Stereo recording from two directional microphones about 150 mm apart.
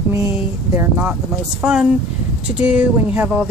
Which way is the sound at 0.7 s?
10° right (ahead or behind).